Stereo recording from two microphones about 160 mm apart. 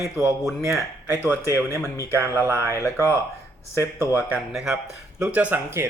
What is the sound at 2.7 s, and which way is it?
Speech, 20° left (ahead or behind).